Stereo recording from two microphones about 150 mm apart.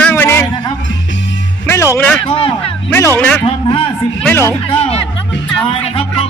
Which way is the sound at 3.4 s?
35° left (ahead or behind).